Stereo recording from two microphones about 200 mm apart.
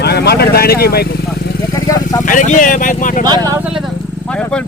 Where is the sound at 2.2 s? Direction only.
40° left (ahead or behind).